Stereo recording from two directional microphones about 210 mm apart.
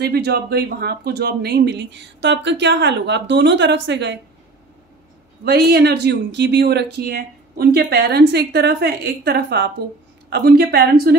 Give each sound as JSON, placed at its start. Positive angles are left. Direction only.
{"t": 0.0, "sound": "speech", "side_deg": -50}
{"t": 5.4, "sound": "speech", "side_deg": -50}